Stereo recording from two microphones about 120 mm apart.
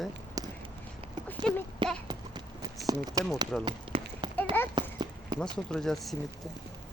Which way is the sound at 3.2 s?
30° right (ahead or behind).